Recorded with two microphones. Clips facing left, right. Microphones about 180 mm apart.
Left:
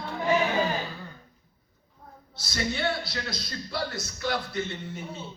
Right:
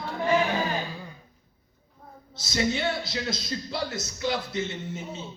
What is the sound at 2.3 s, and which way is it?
A man's voice, 20° right (ahead or behind).